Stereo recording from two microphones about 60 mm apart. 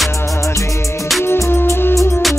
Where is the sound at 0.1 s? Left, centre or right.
Left.